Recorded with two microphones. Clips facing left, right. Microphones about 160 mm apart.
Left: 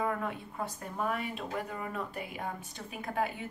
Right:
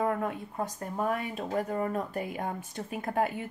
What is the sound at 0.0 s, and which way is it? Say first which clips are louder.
Speech: right 4 dB; 45° right (ahead or behind).